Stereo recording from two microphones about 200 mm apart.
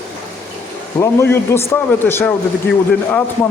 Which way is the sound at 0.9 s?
10° left (ahead or behind).